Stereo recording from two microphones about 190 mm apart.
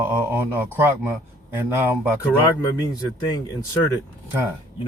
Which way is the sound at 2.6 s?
20° left (ahead or behind).